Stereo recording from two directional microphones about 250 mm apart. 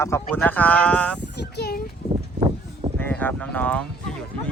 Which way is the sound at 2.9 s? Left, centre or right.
Centre.